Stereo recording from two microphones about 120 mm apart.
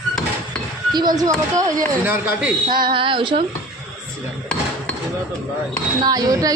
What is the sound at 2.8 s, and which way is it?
Speech, 45° right (ahead or behind).